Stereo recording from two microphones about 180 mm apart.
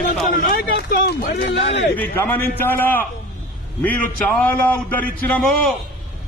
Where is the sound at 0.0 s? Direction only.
55° left (ahead or behind); by 1.9 s 70° left (ahead or behind).